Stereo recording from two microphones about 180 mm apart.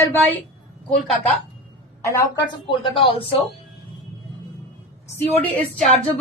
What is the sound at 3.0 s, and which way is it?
Speech, 30° left (ahead or behind).